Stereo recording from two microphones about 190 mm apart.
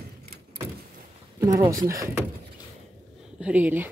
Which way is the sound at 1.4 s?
20° right (ahead or behind).